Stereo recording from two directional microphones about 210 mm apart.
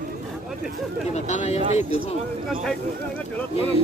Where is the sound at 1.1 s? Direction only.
35° left (ahead or behind).